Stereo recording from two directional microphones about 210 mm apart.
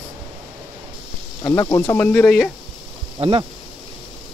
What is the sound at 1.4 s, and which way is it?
Speech, 15° left (ahead or behind).